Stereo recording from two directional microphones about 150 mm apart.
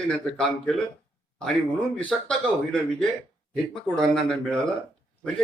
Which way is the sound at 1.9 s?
10° left (ahead or behind).